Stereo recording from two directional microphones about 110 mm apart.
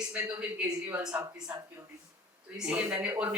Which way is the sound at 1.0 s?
35° right (ahead or behind).